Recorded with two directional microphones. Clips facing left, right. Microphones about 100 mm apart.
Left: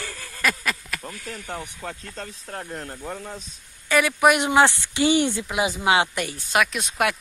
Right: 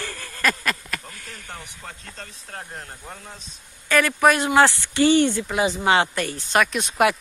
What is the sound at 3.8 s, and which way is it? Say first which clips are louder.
Speech: even; 15° left (ahead or behind).